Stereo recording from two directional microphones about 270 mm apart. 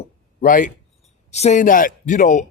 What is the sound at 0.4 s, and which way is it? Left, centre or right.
Speech, left.